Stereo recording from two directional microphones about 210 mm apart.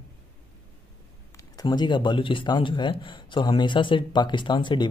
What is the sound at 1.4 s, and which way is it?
A man's voice, 20° left (ahead or behind).